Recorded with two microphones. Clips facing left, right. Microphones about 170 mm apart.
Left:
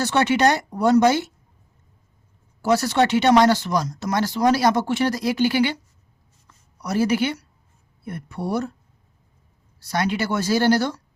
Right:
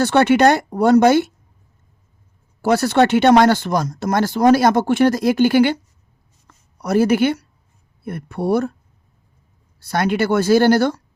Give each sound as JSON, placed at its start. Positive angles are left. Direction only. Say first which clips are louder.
{"t": 0.0, "sound": "speech", "louder": "right 5 dB", "side_deg": -55}
{"t": 2.6, "sound": "speech", "louder": "right 4 dB", "side_deg": -55}
{"t": 6.5, "sound": "a sound", "louder": "right 7 dB", "side_deg": -55}
{"t": 8.0, "sound": "speech", "louder": "right 7 dB", "side_deg": -60}
{"t": 9.8, "sound": "speech", "louder": "right 5 dB", "side_deg": -55}